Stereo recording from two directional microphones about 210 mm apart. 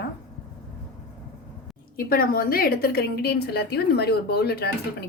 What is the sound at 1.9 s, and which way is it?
A woman's voice, 45° left (ahead or behind).